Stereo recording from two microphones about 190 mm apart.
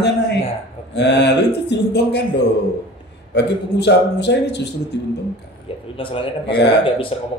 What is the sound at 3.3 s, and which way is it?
A man's voice, 65° left (ahead or behind).